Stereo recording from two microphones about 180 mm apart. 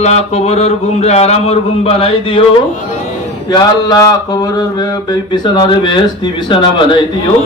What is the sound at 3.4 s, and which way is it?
A man's voice, 20° left (ahead or behind).